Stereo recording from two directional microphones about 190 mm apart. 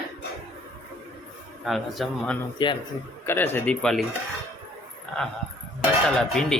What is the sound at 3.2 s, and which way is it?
Speech, 10° left (ahead or behind).